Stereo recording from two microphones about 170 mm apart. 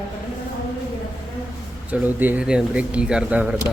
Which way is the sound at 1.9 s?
10° right (ahead or behind).